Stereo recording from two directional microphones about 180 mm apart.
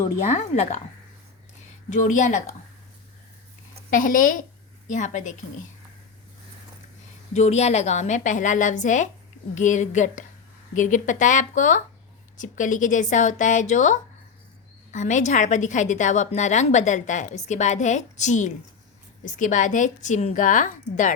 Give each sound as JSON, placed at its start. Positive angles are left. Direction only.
{"t": 0.0, "sound": "a woman's voice", "side_deg": 40}
{"t": 1.9, "sound": "a woman's voice", "side_deg": 45}
{"t": 3.8, "sound": "a woman's voice", "side_deg": 50}
{"t": 7.3, "sound": "a woman's voice", "side_deg": 40}